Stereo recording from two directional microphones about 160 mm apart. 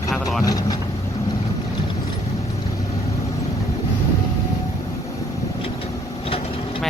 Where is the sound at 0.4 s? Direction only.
25° left (ahead or behind).